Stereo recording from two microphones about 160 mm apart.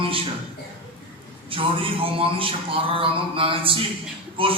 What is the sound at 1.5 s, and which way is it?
A man's voice, 35° right (ahead or behind).